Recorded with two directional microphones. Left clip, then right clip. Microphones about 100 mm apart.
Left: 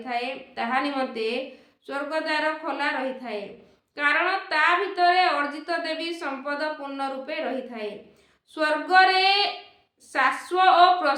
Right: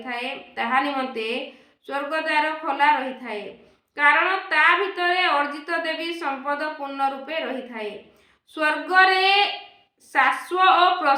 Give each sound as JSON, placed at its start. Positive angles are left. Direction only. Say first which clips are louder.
{"t": 0.0, "sound": "speech", "louder": "even", "side_deg": 15}